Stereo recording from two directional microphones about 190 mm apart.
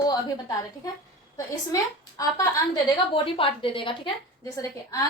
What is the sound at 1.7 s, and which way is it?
A woman's voice, 20° left (ahead or behind).